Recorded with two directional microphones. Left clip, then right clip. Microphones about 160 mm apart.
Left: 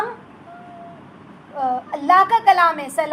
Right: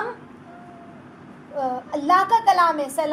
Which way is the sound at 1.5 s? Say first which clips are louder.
Left 3 dB; 15° left (ahead or behind).